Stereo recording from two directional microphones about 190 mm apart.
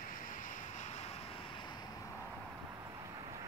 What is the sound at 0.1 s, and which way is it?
Vehicle, 45° left (ahead or behind).